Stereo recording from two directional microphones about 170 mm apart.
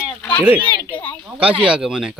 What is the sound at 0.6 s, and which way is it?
Speech, 10° left (ahead or behind).